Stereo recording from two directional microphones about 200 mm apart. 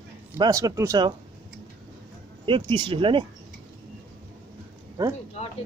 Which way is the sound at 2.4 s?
25° right (ahead or behind).